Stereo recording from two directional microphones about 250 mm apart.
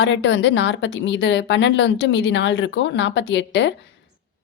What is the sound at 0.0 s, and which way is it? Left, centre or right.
A woman's voice, left.